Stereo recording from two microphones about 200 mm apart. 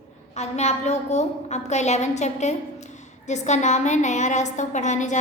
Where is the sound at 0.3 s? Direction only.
35° left (ahead or behind).